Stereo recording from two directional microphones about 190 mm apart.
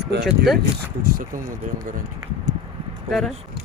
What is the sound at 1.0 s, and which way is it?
Speech, 50° right (ahead or behind).